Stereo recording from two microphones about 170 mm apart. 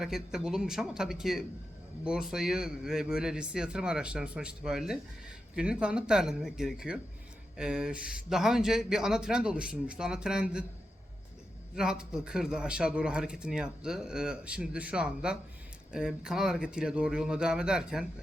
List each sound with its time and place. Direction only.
0.0 s a man's voice: 5° right (ahead or behind)
11.7 s a man's voice: 5° right (ahead or behind)